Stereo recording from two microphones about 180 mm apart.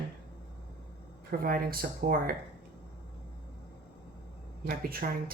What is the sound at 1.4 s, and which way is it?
Speech, 55° right (ahead or behind).